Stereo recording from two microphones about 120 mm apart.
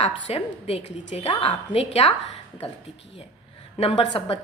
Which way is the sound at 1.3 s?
45° left (ahead or behind).